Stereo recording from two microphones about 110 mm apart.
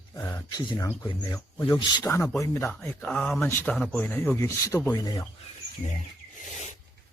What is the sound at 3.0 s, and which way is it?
Speech, 10° left (ahead or behind).